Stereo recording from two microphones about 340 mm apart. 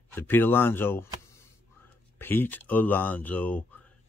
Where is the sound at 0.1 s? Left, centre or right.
Centre.